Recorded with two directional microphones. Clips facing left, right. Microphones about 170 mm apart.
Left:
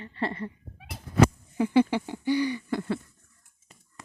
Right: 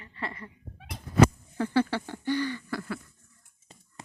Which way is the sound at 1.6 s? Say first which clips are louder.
Left 4 dB; 15° left (ahead or behind).